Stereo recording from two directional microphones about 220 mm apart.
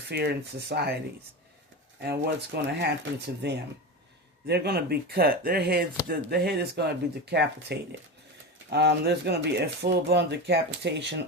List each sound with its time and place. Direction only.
0.1 s speech: 50° right (ahead or behind)
2.0 s speech: 50° right (ahead or behind)